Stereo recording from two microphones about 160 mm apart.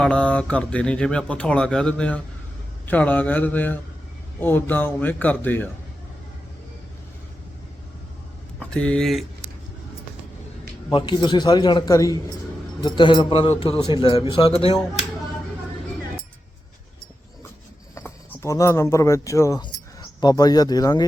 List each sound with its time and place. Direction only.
0.0 s speech: 5° left (ahead or behind)
8.5 s speech: 5° left (ahead or behind)
10.9 s a man's voice: 30° left (ahead or behind)
17.9 s speech: 15° left (ahead or behind)